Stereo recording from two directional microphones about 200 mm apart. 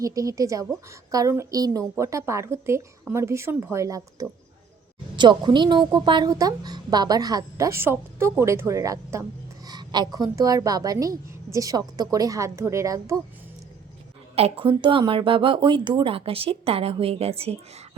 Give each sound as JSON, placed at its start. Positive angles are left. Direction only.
{"t": 0.0, "sound": "a woman's voice", "side_deg": -15}
{"t": 14.3, "sound": "a woman's voice", "side_deg": -30}